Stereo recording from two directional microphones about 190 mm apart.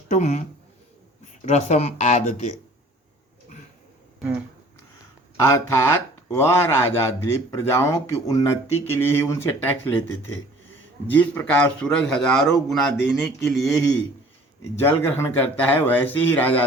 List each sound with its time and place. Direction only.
0.1 s speech: 35° left (ahead or behind)
5.4 s speech: 15° left (ahead or behind)
11.2 s a man's voice: 5° left (ahead or behind)